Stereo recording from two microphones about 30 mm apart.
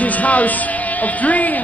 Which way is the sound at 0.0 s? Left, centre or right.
Left.